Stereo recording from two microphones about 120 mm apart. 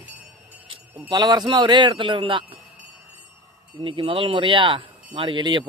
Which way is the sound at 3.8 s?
45° right (ahead or behind).